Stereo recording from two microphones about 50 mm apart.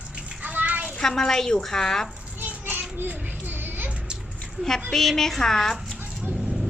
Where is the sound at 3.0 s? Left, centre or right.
Right.